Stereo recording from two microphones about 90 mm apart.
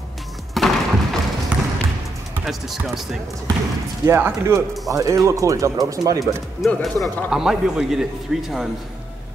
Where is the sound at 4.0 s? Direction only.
30° right (ahead or behind).